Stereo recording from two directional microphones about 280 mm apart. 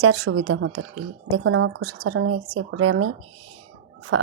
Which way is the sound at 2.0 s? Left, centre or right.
Right.